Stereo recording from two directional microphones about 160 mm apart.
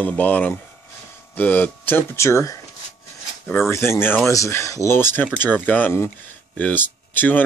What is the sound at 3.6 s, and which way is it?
Speech, 15° left (ahead or behind).